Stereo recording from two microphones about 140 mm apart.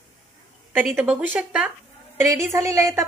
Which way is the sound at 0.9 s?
10° right (ahead or behind).